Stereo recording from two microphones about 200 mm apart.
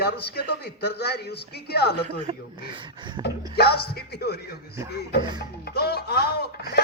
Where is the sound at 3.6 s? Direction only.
50° left (ahead or behind).